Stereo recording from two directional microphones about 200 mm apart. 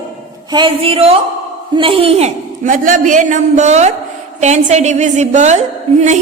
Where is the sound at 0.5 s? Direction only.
25° right (ahead or behind).